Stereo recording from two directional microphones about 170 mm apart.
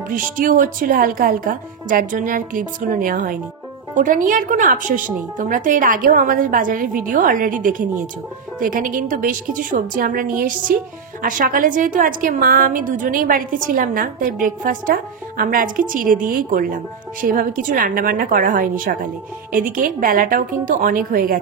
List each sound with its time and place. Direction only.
0.1 s a woman's voice: 50° right (ahead or behind)